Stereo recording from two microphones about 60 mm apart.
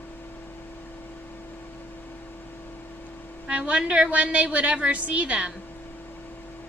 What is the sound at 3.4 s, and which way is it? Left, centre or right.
A woman's voice, centre.